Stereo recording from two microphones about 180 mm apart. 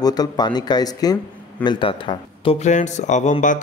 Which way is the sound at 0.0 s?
20° left (ahead or behind).